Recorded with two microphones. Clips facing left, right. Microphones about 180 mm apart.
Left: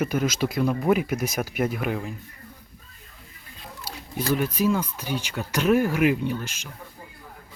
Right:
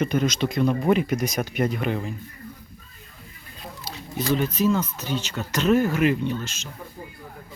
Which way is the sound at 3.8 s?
10° left (ahead or behind).